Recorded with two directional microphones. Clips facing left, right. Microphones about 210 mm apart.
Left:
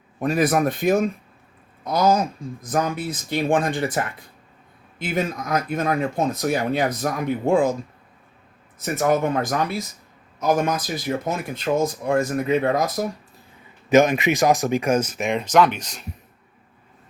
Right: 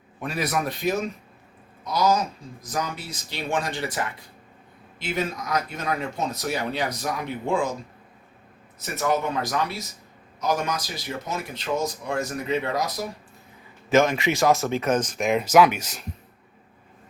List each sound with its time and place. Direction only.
0.2 s speech: 45° left (ahead or behind)
8.8 s speech: 50° left (ahead or behind)
13.9 s speech: 15° left (ahead or behind); by 16.0 s 5° right (ahead or behind)